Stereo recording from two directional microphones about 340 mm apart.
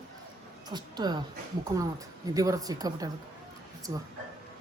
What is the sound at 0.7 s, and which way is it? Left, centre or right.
Speech, centre.